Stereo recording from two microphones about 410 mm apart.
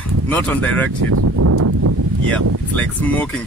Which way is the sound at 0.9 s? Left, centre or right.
Right.